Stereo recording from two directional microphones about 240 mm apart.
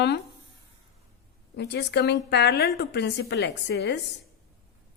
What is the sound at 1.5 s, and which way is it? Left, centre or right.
A woman's voice, left.